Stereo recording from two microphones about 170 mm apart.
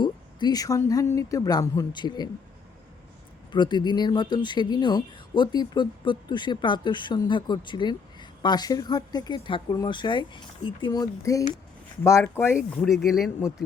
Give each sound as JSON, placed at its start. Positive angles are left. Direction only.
{"t": 0.0, "sound": "speech", "side_deg": 25}
{"t": 3.5, "sound": "speech", "side_deg": 25}
{"t": 12.7, "sound": "speech", "side_deg": 0}